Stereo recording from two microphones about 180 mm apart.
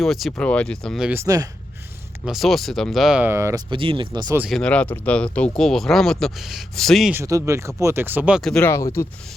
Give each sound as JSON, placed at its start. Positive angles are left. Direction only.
{"t": 0.0, "sound": "speech", "side_deg": 0}
{"t": 1.2, "sound": "speech", "side_deg": -20}
{"t": 2.2, "sound": "speech", "side_deg": 0}
{"t": 3.7, "sound": "speech", "side_deg": -30}
{"t": 4.4, "sound": "speech", "side_deg": 0}
{"t": 7.1, "sound": "speech", "side_deg": -15}